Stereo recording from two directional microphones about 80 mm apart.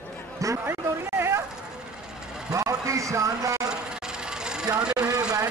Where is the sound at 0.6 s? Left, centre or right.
Right.